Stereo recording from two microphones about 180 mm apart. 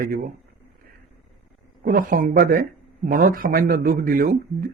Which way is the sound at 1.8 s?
50° right (ahead or behind).